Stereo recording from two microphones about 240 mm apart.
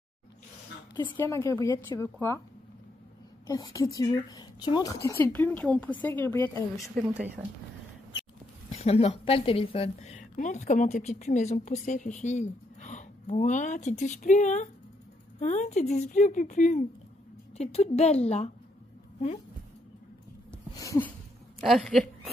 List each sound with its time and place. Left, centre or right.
1.0 s a woman's voice: centre
3.4 s a woman's voice: centre
7.0 s speech: centre
8.6 s a woman's voice: left
20.7 s a sound: centre
21.5 s speech: centre